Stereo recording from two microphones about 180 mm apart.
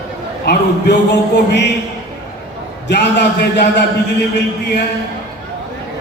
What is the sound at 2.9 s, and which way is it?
Speech, 70° left (ahead or behind).